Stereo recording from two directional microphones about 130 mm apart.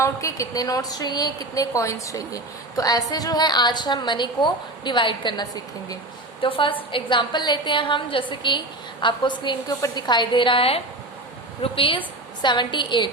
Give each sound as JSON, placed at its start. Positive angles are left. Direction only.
{"t": 0.0, "sound": "a woman's voice", "side_deg": 25}